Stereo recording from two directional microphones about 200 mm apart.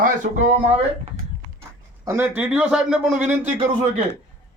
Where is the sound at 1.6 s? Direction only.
15° right (ahead or behind).